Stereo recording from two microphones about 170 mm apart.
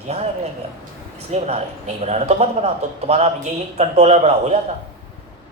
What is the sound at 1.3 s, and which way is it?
A man's voice, 40° right (ahead or behind).